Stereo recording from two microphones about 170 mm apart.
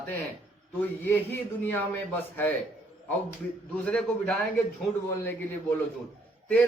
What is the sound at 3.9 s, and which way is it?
Speech, 5° left (ahead or behind).